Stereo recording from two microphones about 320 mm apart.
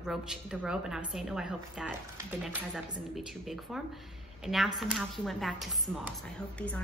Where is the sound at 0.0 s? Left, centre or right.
Centre.